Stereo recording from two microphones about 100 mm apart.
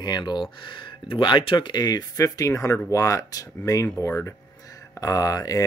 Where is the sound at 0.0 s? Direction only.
45° left (ahead or behind).